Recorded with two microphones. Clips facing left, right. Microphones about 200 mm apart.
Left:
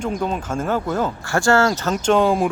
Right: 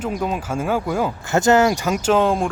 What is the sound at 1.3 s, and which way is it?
Speech, 20° right (ahead or behind).